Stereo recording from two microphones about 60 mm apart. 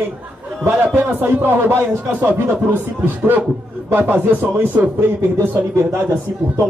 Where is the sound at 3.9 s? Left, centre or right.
Right.